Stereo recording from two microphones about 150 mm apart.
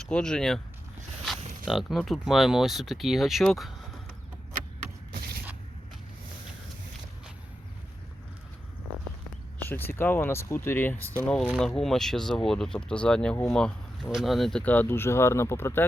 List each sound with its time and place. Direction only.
0.1 s speech: 5° left (ahead or behind)
1.6 s speech: centre (ahead or behind)
5.1 s creak: 90° right
9.6 s speech: 15° left (ahead or behind)